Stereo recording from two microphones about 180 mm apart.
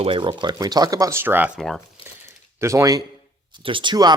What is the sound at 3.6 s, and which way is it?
Speech, 30° right (ahead or behind).